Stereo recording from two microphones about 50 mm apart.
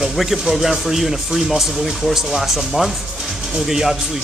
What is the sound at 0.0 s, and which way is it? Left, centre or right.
Speech, centre.